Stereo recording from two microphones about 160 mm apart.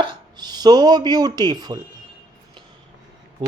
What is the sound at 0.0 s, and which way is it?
Speech, 25° right (ahead or behind).